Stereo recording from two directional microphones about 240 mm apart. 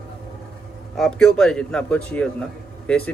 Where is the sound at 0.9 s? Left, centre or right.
Centre.